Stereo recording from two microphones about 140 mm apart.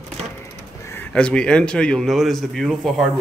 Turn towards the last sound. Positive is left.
turn(degrees=0)  # may be behind; listen again after turning